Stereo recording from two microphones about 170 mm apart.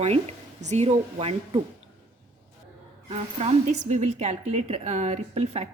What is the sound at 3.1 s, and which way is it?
A woman's voice, 35° right (ahead or behind).